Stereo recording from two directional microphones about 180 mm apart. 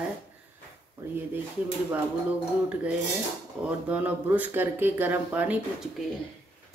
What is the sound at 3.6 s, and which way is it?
Speech, 10° right (ahead or behind).